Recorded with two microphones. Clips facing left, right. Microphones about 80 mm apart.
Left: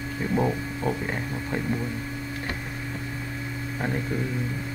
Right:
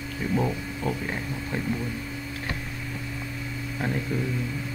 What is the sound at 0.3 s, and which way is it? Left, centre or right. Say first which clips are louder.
Speech: left 2 dB; centre.